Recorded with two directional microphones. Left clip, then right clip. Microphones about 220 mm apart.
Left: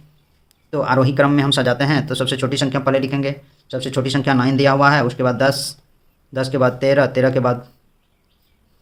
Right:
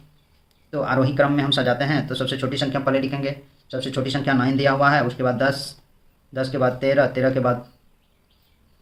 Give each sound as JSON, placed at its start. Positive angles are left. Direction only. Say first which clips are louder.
{"t": 0.7, "sound": "speech", "louder": "left 5 dB", "side_deg": 50}